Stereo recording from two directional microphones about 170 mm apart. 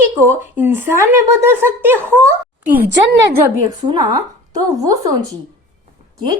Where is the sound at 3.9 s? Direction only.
20° right (ahead or behind).